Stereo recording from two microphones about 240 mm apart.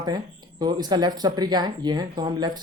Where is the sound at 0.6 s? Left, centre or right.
Centre.